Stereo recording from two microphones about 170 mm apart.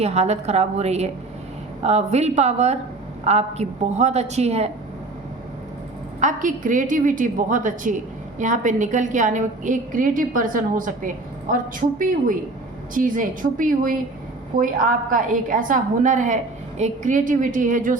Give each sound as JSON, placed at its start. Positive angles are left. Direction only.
{"t": 0.0, "sound": "a woman's voice", "side_deg": -40}
{"t": 6.1, "sound": "a woman's voice", "side_deg": -50}